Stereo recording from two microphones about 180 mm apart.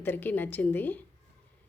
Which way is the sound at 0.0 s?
10° left (ahead or behind).